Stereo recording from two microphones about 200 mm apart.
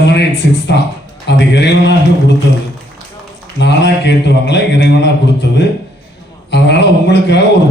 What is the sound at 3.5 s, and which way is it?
A man's voice, 60° left (ahead or behind).